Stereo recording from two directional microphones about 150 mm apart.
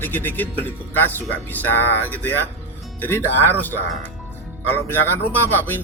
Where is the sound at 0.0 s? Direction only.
10° left (ahead or behind).